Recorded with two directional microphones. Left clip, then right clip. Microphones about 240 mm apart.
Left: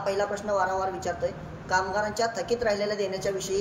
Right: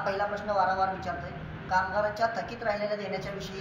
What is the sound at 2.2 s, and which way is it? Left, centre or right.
Speech, centre.